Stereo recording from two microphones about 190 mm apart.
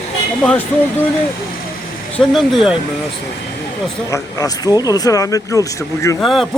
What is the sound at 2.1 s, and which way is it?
Speech, centre (ahead or behind).